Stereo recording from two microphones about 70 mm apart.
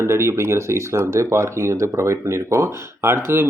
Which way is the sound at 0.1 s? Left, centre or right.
Right.